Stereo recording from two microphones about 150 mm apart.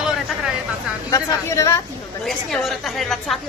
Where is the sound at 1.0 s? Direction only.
20° left (ahead or behind).